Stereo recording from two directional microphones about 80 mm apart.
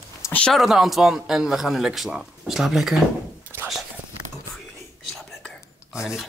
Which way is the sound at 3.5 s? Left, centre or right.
Right.